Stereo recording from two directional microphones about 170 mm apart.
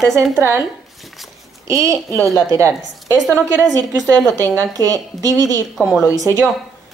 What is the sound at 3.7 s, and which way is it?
Speech, 20° right (ahead or behind).